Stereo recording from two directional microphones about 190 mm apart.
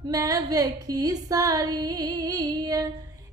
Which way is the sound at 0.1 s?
20° right (ahead or behind).